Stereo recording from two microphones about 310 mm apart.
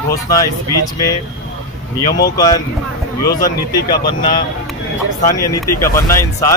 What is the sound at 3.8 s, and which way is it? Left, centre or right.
Speech, centre.